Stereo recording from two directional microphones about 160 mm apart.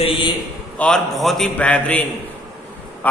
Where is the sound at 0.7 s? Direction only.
5° left (ahead or behind).